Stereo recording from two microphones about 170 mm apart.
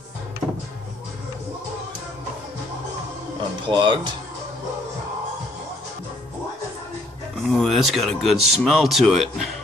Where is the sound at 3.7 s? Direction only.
30° right (ahead or behind).